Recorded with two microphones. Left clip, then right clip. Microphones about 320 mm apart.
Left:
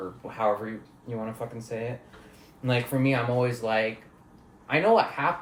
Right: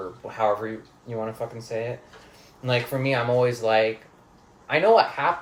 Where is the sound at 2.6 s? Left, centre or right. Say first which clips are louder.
Right 2 dB; centre.